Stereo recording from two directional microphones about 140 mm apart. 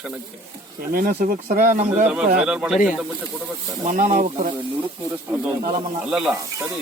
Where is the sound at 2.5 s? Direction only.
5° right (ahead or behind).